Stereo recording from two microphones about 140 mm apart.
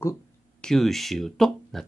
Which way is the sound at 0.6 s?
Centre (ahead or behind).